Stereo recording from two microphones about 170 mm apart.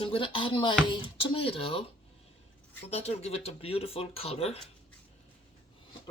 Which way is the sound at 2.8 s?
40° left (ahead or behind).